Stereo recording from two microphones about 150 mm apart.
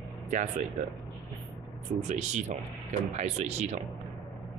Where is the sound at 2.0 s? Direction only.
55° right (ahead or behind).